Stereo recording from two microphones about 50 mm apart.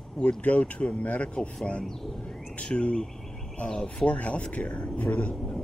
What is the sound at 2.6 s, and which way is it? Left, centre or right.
Speech, centre.